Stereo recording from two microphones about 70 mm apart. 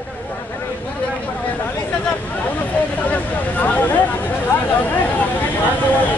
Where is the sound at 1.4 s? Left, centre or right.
Left.